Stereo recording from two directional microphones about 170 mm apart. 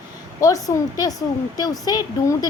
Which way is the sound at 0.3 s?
20° left (ahead or behind).